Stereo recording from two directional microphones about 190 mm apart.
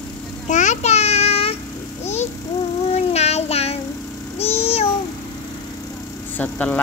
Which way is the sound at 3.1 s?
35° left (ahead or behind).